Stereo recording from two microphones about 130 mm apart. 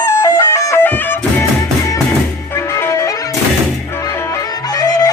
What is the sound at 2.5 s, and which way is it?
Music, 20° left (ahead or behind).